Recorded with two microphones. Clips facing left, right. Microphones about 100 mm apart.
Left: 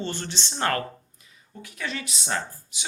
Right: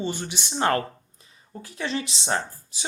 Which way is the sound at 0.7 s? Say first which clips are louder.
Right 3 dB; 30° right (ahead or behind).